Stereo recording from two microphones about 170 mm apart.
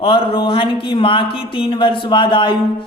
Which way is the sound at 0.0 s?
30° left (ahead or behind).